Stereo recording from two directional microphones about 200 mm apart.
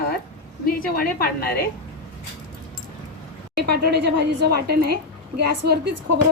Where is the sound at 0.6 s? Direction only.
50° left (ahead or behind).